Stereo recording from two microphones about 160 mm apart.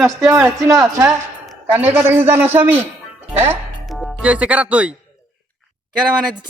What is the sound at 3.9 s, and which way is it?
Speech, 5° right (ahead or behind).